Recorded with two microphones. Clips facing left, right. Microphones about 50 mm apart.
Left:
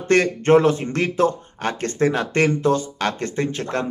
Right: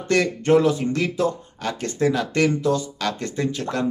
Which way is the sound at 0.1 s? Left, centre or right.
Left.